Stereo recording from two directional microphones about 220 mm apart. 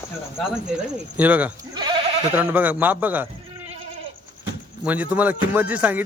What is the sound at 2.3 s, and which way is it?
A man's voice, 10° right (ahead or behind).